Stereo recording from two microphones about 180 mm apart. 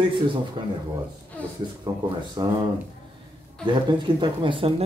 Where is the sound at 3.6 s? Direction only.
25° right (ahead or behind).